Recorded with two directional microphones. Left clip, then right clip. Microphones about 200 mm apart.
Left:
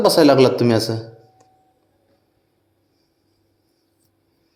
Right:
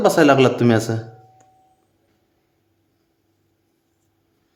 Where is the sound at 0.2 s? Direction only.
Centre (ahead or behind).